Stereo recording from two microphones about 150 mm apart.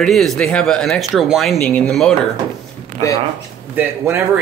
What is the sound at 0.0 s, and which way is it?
Speech, centre (ahead or behind).